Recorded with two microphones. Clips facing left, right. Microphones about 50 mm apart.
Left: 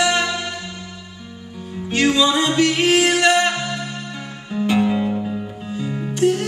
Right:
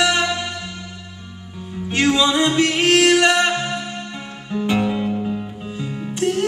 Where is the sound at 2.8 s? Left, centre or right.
Right.